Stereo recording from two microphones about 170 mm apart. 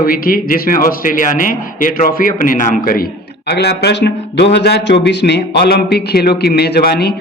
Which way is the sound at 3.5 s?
75° left (ahead or behind).